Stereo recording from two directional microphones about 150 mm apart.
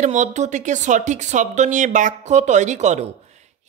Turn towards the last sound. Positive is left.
turn(degrees=-50)  # may be behind; listen again after turning